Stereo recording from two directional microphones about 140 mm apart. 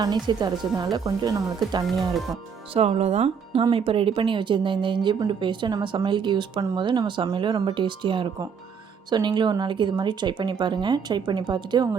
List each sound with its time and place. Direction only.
0.0 s speech: 30° right (ahead or behind)
2.0 s speech: centre (ahead or behind)
2.7 s speech: 50° right (ahead or behind)